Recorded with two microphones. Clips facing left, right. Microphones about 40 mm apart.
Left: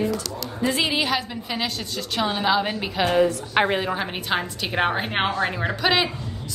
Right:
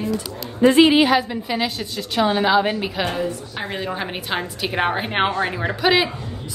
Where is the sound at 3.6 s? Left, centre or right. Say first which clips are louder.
Left 13 dB; left.